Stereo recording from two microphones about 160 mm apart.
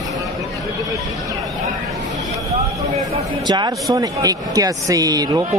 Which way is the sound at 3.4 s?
25° right (ahead or behind).